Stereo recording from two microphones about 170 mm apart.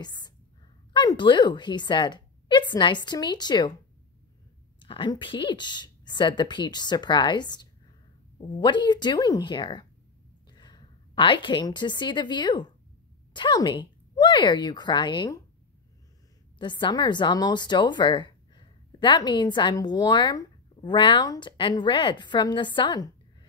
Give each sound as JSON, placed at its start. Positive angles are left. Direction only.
{"t": 0.0, "sound": "a sound", "side_deg": 25}
{"t": 0.9, "sound": "speech", "side_deg": 25}
{"t": 4.7, "sound": "a woman's voice", "side_deg": 30}
{"t": 16.5, "sound": "speech", "side_deg": 25}